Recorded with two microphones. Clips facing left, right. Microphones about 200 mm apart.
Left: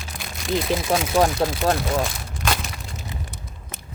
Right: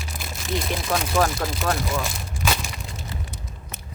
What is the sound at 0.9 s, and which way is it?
Speech, 25° left (ahead or behind).